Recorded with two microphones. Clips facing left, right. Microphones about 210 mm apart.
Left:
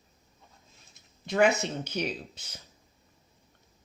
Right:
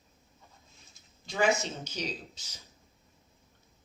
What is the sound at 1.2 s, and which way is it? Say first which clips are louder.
Speech: left 4 dB; 60° left (ahead or behind).